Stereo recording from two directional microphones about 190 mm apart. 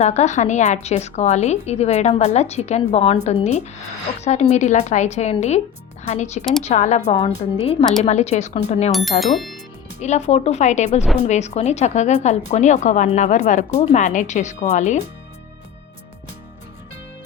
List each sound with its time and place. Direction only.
0.0 s a woman's voice: 35° left (ahead or behind)
8.9 s speech: centre (ahead or behind)
10.0 s a woman's voice: 35° left (ahead or behind)